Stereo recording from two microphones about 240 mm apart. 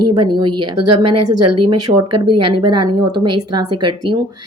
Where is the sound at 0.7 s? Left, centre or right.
Right.